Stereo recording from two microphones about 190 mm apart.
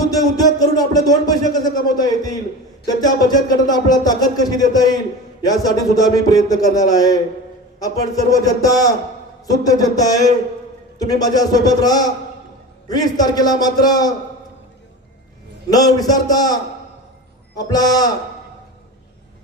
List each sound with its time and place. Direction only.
0.1 s speech: 20° left (ahead or behind)
8.3 s speech: 20° left (ahead or behind)
15.7 s speech: 20° left (ahead or behind)